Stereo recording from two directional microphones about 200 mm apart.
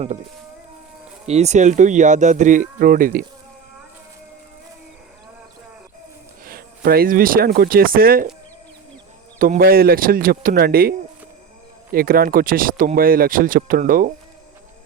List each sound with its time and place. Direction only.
1.3 s speech: 35° right (ahead or behind)
6.4 s speech: 50° right (ahead or behind)
9.4 s speech: 45° right (ahead or behind)